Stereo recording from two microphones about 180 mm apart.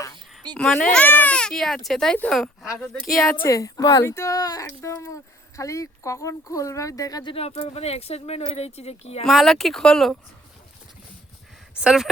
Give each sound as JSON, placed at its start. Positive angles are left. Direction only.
{"t": 0.5, "sound": "speech", "side_deg": 5}
{"t": 3.4, "sound": "speech", "side_deg": 20}
{"t": 9.2, "sound": "speech", "side_deg": 0}
{"t": 11.8, "sound": "speech", "side_deg": -5}